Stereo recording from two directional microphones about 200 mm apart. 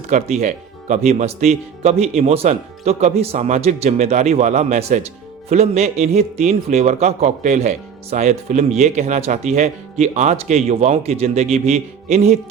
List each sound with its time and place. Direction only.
0.1 s a man's voice: 35° right (ahead or behind)